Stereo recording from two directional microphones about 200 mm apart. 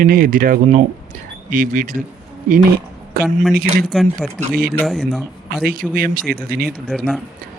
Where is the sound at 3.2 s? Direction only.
50° right (ahead or behind).